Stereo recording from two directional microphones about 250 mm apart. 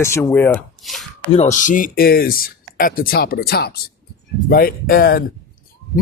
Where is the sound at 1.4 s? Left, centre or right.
Left.